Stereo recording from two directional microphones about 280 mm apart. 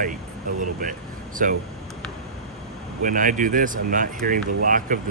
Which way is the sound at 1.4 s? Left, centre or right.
Right.